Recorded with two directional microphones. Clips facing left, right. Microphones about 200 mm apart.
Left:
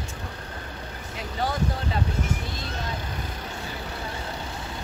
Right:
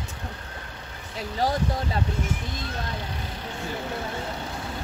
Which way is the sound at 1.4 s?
40° right (ahead or behind).